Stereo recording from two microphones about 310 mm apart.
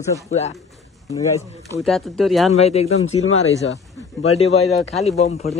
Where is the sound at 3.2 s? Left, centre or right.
Left.